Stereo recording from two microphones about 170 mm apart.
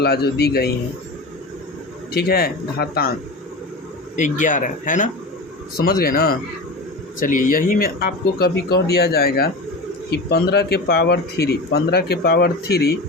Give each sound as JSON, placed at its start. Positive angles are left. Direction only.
{"t": 0.0, "sound": "speech", "side_deg": 70}
{"t": 2.1, "sound": "speech", "side_deg": 65}
{"t": 4.2, "sound": "speech", "side_deg": 50}
{"t": 5.7, "sound": "speech", "side_deg": 60}